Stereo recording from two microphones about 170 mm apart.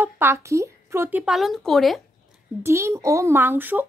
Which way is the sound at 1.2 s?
Centre (ahead or behind).